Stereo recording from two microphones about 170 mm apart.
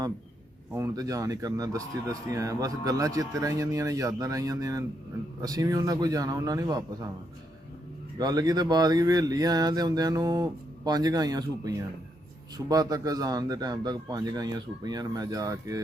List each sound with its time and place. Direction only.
0.7 s speech: 20° right (ahead or behind)
8.2 s speech: 20° right (ahead or behind)